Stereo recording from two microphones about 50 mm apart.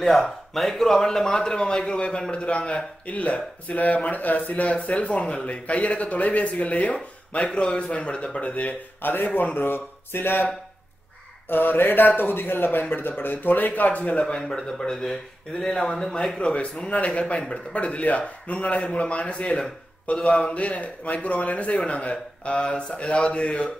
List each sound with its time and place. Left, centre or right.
0.0 s a man's voice: centre; by 10.5 s left
11.4 s mantra: left
12.9 s speech: left
14.2 s a man's voice: centre